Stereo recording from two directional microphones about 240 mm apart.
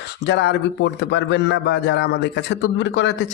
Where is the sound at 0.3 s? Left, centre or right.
Left.